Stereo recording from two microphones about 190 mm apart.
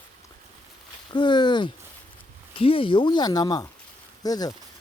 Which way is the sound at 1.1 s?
25° left (ahead or behind).